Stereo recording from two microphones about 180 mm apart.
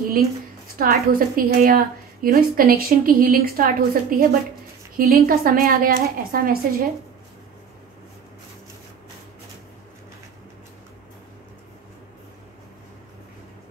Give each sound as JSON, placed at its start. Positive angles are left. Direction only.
{"t": 0.7, "sound": "a woman's voice", "side_deg": -50}